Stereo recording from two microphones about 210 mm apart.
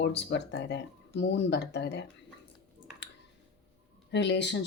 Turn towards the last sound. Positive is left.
turn(degrees=55)  # may be behind; listen again after turning